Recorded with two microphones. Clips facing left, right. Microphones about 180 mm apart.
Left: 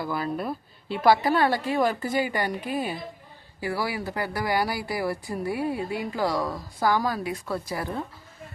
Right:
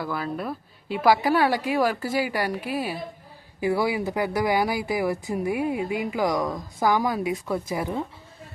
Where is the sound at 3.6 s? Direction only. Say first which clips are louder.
Right 5 dB; 20° right (ahead or behind).